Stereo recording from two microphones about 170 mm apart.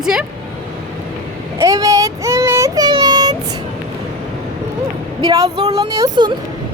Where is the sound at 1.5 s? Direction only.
20° right (ahead or behind).